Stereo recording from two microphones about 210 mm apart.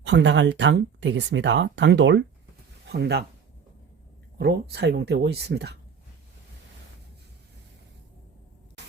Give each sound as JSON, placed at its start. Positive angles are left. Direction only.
{"t": 0.0, "sound": "speech", "side_deg": -55}
{"t": 4.4, "sound": "speech", "side_deg": -50}